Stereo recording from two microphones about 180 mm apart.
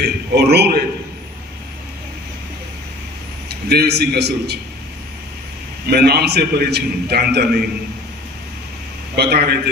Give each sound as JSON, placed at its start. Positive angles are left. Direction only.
{"t": 0.0, "sound": "a man's voice", "side_deg": -65}
{"t": 3.5, "sound": "a man's voice", "side_deg": -65}
{"t": 5.9, "sound": "a man's voice", "side_deg": -60}
{"t": 9.1, "sound": "a man's voice", "side_deg": -65}